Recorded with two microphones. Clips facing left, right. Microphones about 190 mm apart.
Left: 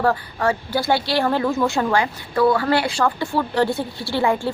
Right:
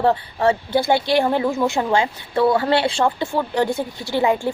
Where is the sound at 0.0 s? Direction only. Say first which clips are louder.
Right 2 dB; 25° right (ahead or behind).